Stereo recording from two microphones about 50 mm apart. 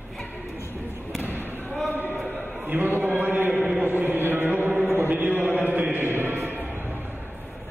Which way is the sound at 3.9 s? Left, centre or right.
Right.